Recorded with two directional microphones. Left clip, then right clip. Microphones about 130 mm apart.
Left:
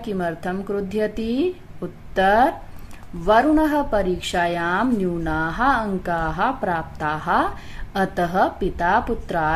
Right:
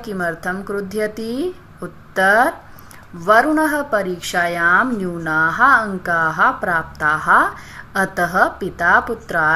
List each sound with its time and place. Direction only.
0.0 s a woman's voice: 15° left (ahead or behind)